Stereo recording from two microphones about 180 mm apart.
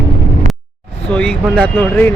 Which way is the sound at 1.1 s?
5° left (ahead or behind).